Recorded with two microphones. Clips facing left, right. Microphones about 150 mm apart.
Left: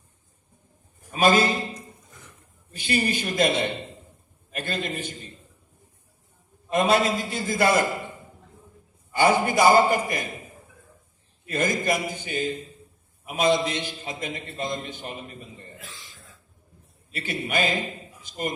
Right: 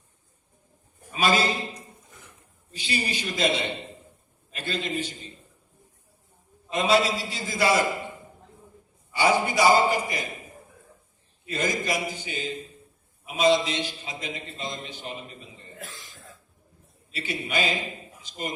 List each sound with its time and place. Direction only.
1.1 s a man's voice: 50° left (ahead or behind)
2.7 s a man's voice: 50° left (ahead or behind)
6.7 s a man's voice: 50° left (ahead or behind)
9.1 s a man's voice: 50° left (ahead or behind)
11.4 s a man's voice: 50° left (ahead or behind)
15.8 s cough: 45° right (ahead or behind)
17.1 s a man's voice: 50° left (ahead or behind)